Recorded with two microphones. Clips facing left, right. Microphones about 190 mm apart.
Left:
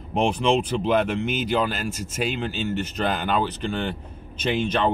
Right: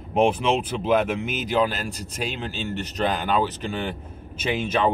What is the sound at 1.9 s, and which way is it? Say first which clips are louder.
Speech: left 3 dB; 35° right (ahead or behind).